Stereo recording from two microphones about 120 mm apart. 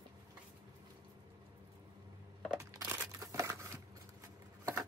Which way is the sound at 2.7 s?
25° right (ahead or behind).